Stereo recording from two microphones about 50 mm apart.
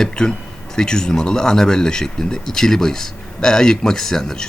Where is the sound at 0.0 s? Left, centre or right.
Centre.